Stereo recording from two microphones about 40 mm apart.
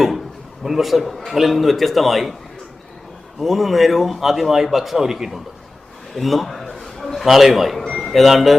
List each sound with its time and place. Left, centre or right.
0.6 s a man's voice: centre
3.4 s a man's voice: centre
6.1 s a sound: centre
7.9 s speech: centre